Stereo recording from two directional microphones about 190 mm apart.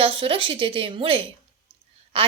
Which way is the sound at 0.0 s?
25° right (ahead or behind).